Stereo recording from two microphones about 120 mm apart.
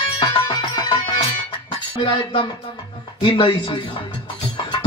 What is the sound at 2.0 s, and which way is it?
Speech, 45° left (ahead or behind).